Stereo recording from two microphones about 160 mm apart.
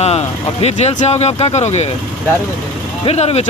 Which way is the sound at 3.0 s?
40° left (ahead or behind).